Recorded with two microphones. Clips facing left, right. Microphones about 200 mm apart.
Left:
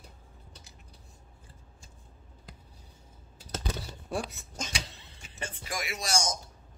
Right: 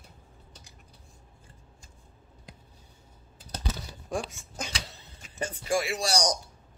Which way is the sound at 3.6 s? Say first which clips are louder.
Right 3 dB; 5° left (ahead or behind).